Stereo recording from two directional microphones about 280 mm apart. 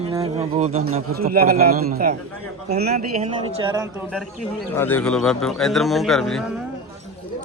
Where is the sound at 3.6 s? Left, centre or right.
Centre.